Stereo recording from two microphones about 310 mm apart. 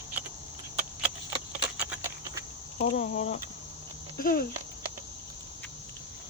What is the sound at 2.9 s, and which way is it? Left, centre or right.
Speech, left.